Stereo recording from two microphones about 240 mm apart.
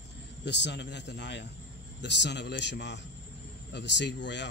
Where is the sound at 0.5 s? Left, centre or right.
Left.